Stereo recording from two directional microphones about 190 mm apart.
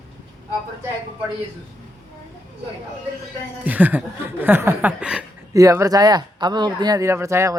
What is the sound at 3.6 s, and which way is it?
Speech, 10° right (ahead or behind).